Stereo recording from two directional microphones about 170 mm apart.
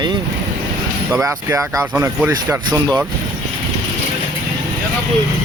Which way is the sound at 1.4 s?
15° right (ahead or behind).